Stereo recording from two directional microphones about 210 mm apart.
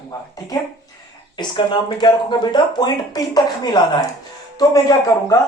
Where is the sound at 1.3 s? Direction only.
20° left (ahead or behind).